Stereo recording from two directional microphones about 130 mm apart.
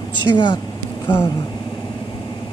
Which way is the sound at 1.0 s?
15° left (ahead or behind).